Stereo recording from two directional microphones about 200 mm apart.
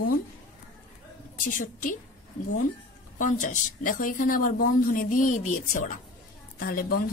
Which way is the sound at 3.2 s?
40° left (ahead or behind).